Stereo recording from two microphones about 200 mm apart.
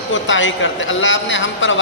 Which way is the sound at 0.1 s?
70° left (ahead or behind).